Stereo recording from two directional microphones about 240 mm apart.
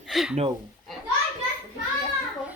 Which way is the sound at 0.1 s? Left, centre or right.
Centre.